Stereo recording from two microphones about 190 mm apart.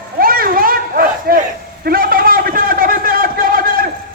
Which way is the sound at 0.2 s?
50° right (ahead or behind).